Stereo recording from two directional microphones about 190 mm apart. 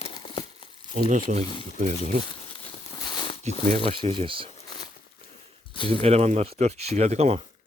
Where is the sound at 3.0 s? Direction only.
25° left (ahead or behind).